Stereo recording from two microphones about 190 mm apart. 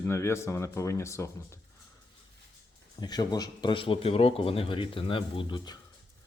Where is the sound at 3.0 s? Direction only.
20° left (ahead or behind).